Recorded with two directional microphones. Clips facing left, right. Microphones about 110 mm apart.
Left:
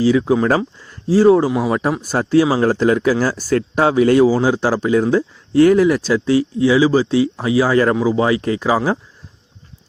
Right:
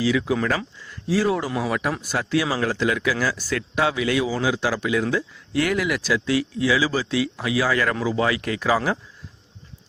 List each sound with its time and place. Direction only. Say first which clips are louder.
0.0 s speech: left 7 dB; 35° left (ahead or behind)
1.9 s speech: left 7 dB; 35° left (ahead or behind)